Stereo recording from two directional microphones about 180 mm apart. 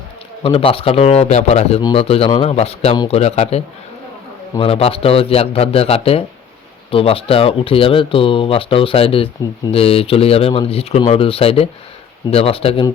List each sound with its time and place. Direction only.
0.4 s speech: 30° left (ahead or behind)
4.6 s speech: 30° left (ahead or behind)